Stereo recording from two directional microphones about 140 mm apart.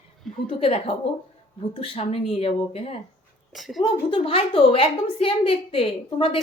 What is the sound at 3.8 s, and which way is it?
A woman's voice, 40° left (ahead or behind).